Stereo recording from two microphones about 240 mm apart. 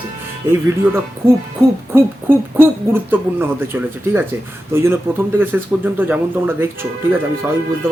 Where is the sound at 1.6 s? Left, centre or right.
Centre.